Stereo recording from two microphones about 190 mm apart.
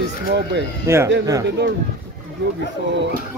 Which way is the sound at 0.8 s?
15° right (ahead or behind).